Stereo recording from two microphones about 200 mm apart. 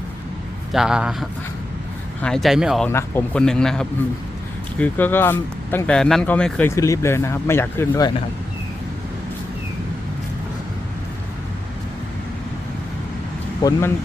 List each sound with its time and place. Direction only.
0.7 s a man's voice: 5° right (ahead or behind); by 8.1 s 15° left (ahead or behind)
13.6 s speech: 20° left (ahead or behind)